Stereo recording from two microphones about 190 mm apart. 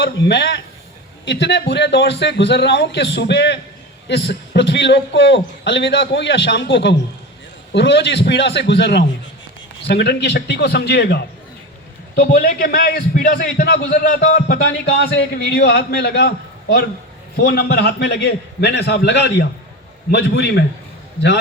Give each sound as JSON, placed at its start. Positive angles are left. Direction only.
{"t": 0.0, "sound": "a man's voice", "side_deg": 65}
{"t": 14.7, "sound": "a man's voice", "side_deg": 65}